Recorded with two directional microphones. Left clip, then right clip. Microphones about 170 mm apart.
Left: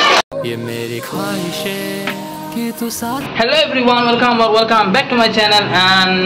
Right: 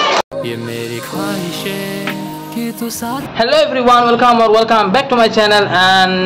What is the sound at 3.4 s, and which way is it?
A man's voice, 40° right (ahead or behind).